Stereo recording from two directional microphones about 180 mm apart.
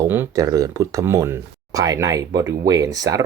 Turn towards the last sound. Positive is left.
turn(degrees=-20)  # may be behind; listen again after turning